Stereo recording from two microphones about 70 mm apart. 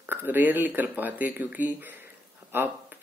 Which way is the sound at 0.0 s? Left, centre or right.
Right.